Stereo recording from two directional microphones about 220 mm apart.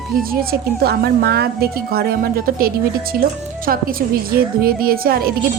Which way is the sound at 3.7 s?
40° right (ahead or behind).